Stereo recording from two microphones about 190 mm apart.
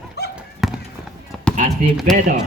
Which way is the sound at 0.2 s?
60° left (ahead or behind).